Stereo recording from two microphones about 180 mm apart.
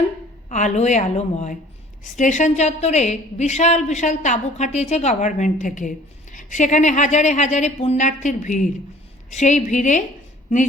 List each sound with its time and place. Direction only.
0.5 s a woman's voice: 40° left (ahead or behind)